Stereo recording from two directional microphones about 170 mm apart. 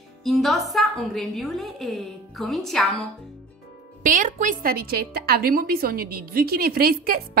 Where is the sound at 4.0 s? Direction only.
50° right (ahead or behind).